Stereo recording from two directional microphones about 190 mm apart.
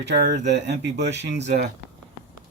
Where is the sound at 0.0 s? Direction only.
60° right (ahead or behind).